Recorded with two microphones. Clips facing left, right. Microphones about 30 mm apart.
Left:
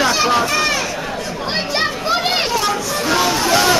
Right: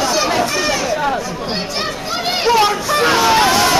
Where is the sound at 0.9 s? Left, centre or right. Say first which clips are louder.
Right 7 dB; right.